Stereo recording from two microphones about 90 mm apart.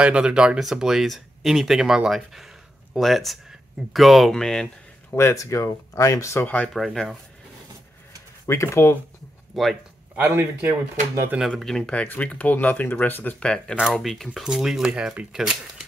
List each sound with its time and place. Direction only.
0.0 s speech: 10° right (ahead or behind); by 4.6 s 5° left (ahead or behind)
5.3 s speech: 40° left (ahead or behind)
6.4 s speech: 15° left (ahead or behind)
6.7 s speech: centre (ahead or behind)
8.5 s speech: 30° left (ahead or behind)
9.5 s speech: centre (ahead or behind)
10.1 s speech: 30° right (ahead or behind)
11.3 s speech: centre (ahead or behind)